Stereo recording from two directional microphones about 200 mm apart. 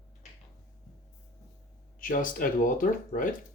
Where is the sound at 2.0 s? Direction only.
45° left (ahead or behind).